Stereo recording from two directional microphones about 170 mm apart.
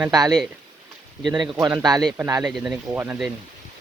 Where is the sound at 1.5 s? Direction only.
20° right (ahead or behind).